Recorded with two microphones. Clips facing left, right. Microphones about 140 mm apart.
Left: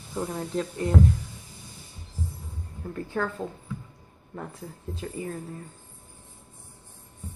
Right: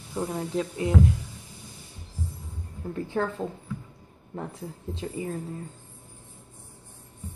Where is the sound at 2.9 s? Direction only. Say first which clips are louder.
Right 2 dB; 25° right (ahead or behind).